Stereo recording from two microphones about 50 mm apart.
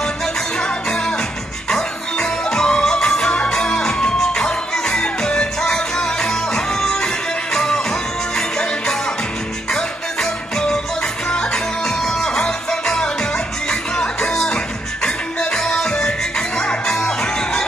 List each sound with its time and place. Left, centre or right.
1.7 s music: centre
11.2 s music: centre